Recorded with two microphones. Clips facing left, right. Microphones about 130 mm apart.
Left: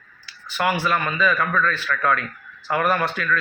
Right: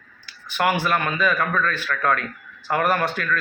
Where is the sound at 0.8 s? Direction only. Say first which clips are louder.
Even; 50° right (ahead or behind).